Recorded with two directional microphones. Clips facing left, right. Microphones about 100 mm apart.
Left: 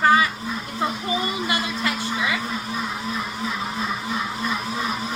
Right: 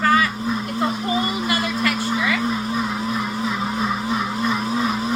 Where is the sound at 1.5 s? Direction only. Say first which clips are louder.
Right 3 dB; 20° left (ahead or behind).